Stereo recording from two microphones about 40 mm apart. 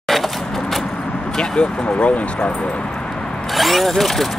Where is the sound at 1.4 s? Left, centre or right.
Left.